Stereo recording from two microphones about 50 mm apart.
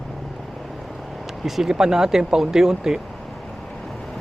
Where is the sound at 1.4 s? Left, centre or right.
Centre.